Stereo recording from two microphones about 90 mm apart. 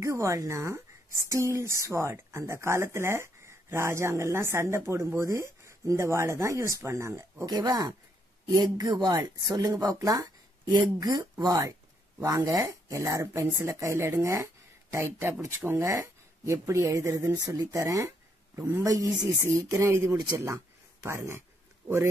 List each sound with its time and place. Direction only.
0.0 s speech: 35° right (ahead or behind)
7.4 s speech: 50° right (ahead or behind); by 15.9 s 25° right (ahead or behind)
15.9 s a sound: 35° right (ahead or behind)
16.5 s speech: 30° right (ahead or behind)
18.6 s speech: 25° right (ahead or behind)
18.9 s speech: 40° right (ahead or behind)